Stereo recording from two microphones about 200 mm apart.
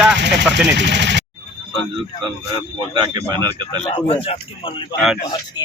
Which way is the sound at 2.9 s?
25° right (ahead or behind).